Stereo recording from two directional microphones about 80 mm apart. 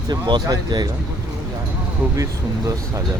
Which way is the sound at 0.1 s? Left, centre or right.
Right.